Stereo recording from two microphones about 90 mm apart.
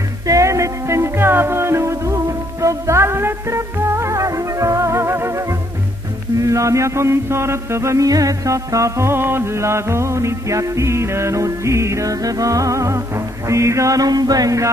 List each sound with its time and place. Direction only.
0.3 s music: 35° right (ahead or behind)
6.4 s music: 35° right (ahead or behind)